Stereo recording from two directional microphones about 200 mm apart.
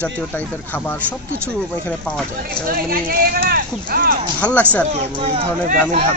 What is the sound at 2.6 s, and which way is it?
Speech, 45° right (ahead or behind).